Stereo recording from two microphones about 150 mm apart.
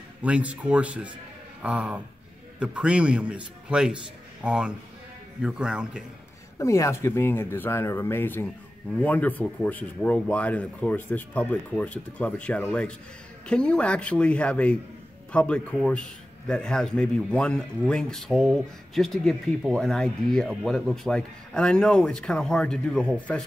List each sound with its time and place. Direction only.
0.2 s a man's voice: 10° right (ahead or behind)
6.6 s a man's voice: 20° left (ahead or behind)